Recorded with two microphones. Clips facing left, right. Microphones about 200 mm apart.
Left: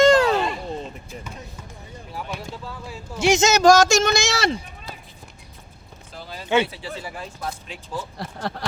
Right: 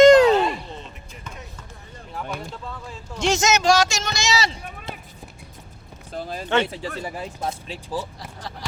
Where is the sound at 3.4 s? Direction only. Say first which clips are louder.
Left 5 dB; 35° left (ahead or behind); by 4.6 s 55° left (ahead or behind).